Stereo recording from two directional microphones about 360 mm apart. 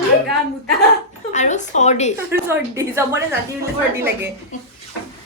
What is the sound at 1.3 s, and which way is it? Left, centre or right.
Speech, centre.